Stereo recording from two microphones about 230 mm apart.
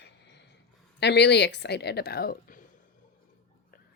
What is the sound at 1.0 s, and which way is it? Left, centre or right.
A woman's voice, left.